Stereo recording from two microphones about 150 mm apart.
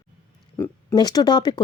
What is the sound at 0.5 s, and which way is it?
Speech, 20° left (ahead or behind).